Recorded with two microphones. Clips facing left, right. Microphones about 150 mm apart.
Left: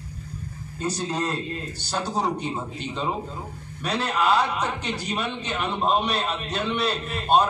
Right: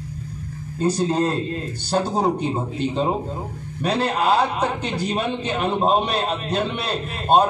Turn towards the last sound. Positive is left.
turn(degrees=-45)  # may be behind; listen again after turning